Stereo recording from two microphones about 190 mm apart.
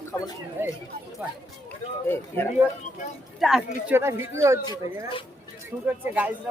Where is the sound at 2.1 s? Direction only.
10° left (ahead or behind).